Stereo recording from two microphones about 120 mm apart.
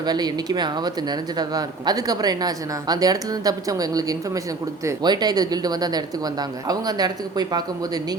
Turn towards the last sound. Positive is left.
turn(degrees=-35)  # may be behind; listen again after turning